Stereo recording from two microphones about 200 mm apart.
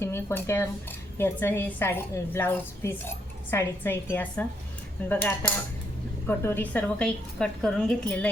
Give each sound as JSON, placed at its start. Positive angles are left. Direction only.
{"t": 0.0, "sound": "speech", "side_deg": 10}